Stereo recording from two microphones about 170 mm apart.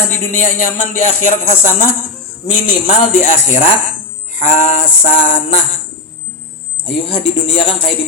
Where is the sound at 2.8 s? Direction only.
50° left (ahead or behind).